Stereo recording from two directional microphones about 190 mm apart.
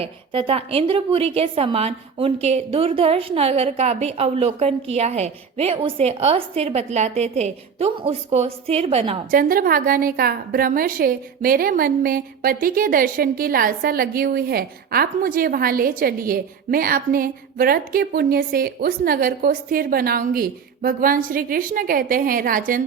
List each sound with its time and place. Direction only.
0.0 s a woman's voice: 30° right (ahead or behind)
9.3 s a woman's voice: 50° right (ahead or behind)